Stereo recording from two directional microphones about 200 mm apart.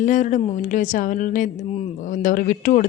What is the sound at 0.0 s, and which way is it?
Speech, 40° left (ahead or behind).